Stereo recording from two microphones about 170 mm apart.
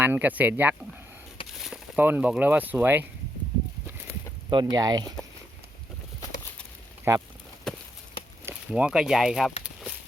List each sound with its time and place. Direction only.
0.0 s speech: 10° right (ahead or behind)
4.4 s speech: 20° right (ahead or behind)
7.1 s speech: 15° right (ahead or behind)
8.4 s speech: 5° right (ahead or behind)